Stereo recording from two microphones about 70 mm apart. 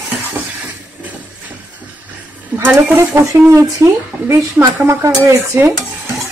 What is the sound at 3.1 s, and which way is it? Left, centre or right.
Speech, right.